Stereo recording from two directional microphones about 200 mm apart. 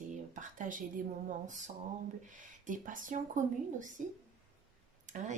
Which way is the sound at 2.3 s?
40° right (ahead or behind).